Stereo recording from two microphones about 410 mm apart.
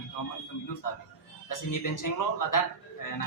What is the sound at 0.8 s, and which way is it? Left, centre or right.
Speech, left.